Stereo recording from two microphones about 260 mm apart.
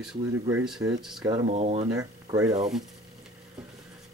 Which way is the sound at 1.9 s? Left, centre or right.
Centre.